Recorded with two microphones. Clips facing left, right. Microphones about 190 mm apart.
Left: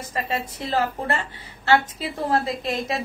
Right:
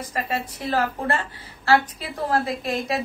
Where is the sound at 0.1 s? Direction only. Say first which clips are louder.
Left 1 dB; 25° left (ahead or behind).